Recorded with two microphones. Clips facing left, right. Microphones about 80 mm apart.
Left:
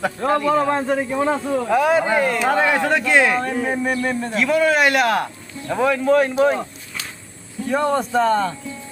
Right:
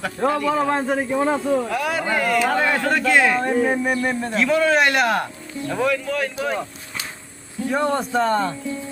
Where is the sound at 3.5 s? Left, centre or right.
Centre.